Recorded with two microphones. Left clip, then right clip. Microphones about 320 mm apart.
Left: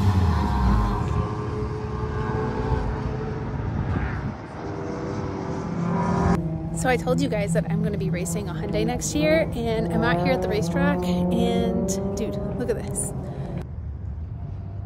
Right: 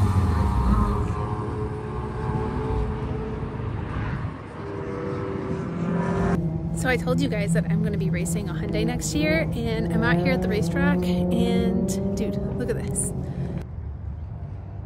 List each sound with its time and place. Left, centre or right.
5.8 s vehicle: left
6.8 s speech: centre